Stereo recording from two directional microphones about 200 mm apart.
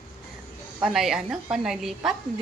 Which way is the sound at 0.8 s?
Centre (ahead or behind).